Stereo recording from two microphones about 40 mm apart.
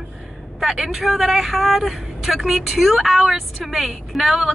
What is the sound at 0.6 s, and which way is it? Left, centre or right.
Speech, centre.